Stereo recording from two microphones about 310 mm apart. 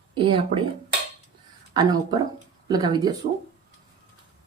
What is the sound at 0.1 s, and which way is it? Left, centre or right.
Speech, centre.